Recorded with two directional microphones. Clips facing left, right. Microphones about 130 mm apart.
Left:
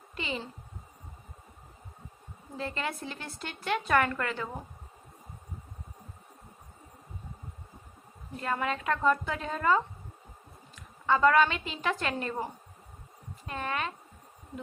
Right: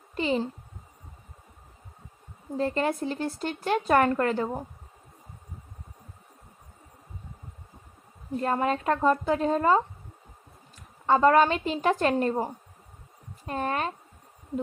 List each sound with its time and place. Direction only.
0.2 s speech: 40° right (ahead or behind)
2.6 s speech: 40° right (ahead or behind)
8.4 s a woman's voice: 35° right (ahead or behind)